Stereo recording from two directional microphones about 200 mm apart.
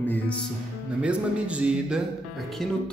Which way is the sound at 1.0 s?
5° right (ahead or behind).